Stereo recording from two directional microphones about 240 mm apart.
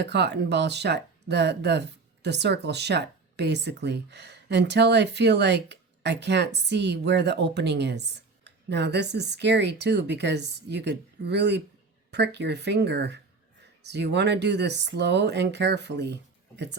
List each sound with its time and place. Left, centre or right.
0.0 s speech: right